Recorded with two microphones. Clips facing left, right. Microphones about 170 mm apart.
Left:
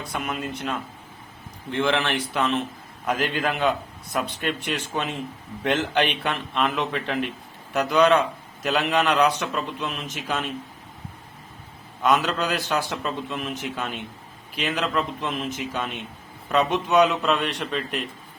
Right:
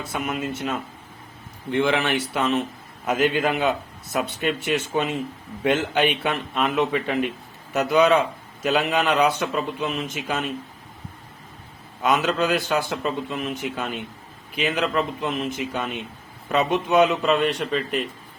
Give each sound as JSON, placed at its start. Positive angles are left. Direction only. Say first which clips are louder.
{"t": 0.1, "sound": "a man's voice", "louder": "right 2 dB", "side_deg": 0}
{"t": 12.0, "sound": "a man's voice", "louder": "right 1 dB", "side_deg": 0}